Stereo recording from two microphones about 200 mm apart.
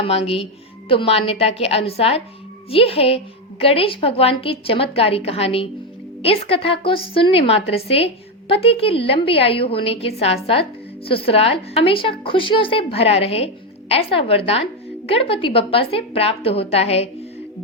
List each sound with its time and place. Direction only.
0.0 s a woman's voice: 30° left (ahead or behind)